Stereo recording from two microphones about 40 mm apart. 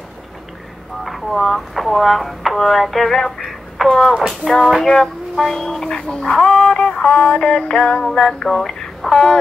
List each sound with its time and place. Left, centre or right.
1.0 s speech: centre
3.3 s a sound: centre
4.4 s speech: centre
6.8 s music: centre
7.1 s synthetic singing: left; by 9.4 s centre